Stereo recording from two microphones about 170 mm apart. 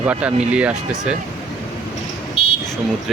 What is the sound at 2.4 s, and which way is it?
Vehicle, 35° left (ahead or behind).